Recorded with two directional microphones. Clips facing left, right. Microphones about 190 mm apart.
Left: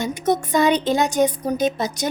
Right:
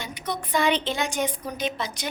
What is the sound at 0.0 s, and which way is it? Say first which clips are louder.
Speech: left 11 dB; 45° left (ahead or behind).